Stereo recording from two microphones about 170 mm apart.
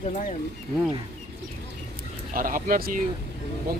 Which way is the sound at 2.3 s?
55° right (ahead or behind).